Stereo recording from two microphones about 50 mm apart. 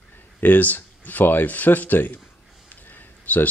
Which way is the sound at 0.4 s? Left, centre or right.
Left.